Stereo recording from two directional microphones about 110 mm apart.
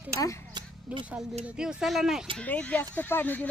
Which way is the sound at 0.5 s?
45° right (ahead or behind).